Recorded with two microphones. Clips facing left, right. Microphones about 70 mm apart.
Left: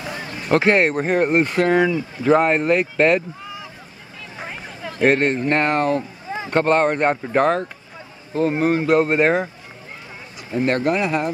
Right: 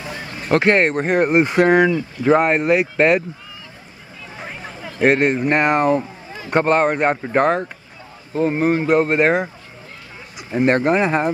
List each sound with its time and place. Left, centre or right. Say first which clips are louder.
0.5 s speech: right 1 dB; centre
1.3 s speech: right 6 dB; centre
1.9 s speech: right 1 dB; centre
4.4 s speech: even; centre
6.5 s speech: right 1 dB; centre
10.5 s speech: right 3 dB; right